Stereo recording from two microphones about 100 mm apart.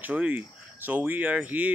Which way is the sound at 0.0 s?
15° right (ahead or behind).